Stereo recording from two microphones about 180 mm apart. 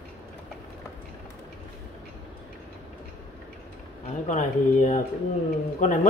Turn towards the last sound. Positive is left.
turn(degrees=45)  # may be behind; listen again after turning